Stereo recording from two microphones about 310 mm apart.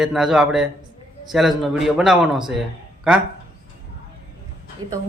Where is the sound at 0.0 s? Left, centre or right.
Centre.